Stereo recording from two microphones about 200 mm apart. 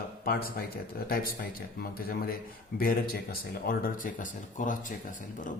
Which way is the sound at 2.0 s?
50° left (ahead or behind).